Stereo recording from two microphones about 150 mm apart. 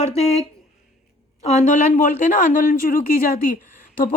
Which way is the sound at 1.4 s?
50° left (ahead or behind).